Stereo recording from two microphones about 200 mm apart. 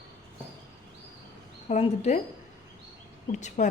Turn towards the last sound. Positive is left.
turn(degrees=35)  # may be behind; listen again after turning